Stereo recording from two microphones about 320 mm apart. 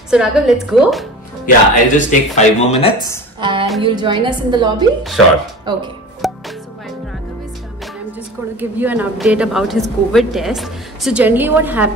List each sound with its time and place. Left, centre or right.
0.1 s a woman's voice: centre
1.4 s speech: left
3.3 s a sound: centre
3.8 s a woman's voice: centre
6.2 s music: centre
8.5 s a woman's voice: centre